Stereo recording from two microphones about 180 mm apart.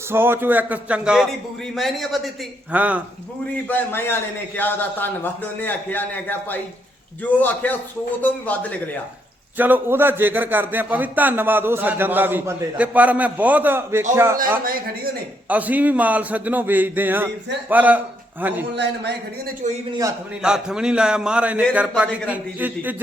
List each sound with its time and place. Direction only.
0.1 s a man's voice: 10° right (ahead or behind)
3.7 s a man's voice: 10° left (ahead or behind)
9.6 s a man's voice: 10° right (ahead or behind)
14.6 s speech: 55° right (ahead or behind)
15.4 s a man's voice: 10° right (ahead or behind)
19.6 s a man's voice: 40° right (ahead or behind)
20.4 s a man's voice: 5° right (ahead or behind)